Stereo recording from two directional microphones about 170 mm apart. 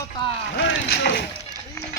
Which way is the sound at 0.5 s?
75° left (ahead or behind).